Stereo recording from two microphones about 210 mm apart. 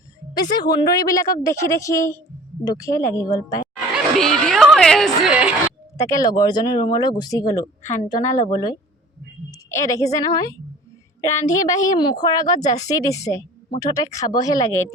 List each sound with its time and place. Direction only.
0.3 s speech: 20° left (ahead or behind)
3.9 s a woman's voice: centre (ahead or behind)
5.6 s a woman's voice: 15° left (ahead or behind)
11.6 s speech: 15° left (ahead or behind)
12.5 s speech: 35° left (ahead or behind)
12.8 s speech: 15° left (ahead or behind)